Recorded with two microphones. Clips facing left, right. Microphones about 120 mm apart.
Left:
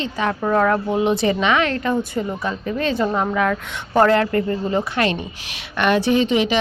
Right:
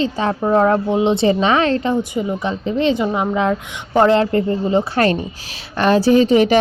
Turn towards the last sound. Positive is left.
turn(degrees=-45)  # may be behind; listen again after turning